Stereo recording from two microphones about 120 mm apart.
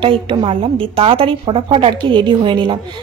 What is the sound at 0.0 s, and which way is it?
A woman's voice, 45° right (ahead or behind).